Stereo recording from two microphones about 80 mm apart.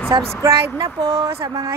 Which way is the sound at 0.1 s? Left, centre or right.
Right.